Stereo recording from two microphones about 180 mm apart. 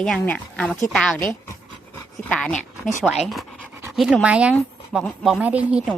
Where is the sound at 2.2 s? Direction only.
5° left (ahead or behind).